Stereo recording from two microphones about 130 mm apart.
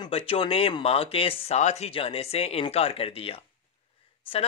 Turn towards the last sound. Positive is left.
turn(degrees=45)  # may be behind; listen again after turning